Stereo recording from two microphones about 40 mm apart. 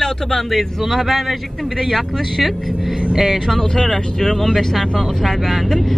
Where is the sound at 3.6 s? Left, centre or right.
Centre.